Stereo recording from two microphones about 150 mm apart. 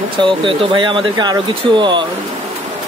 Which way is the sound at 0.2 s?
35° right (ahead or behind).